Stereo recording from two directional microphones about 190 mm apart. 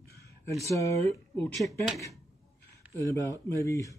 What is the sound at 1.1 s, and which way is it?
Speech, 5° left (ahead or behind).